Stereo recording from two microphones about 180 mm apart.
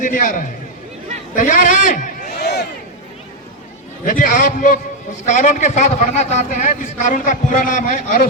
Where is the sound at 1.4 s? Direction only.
45° left (ahead or behind); by 2.7 s 65° left (ahead or behind).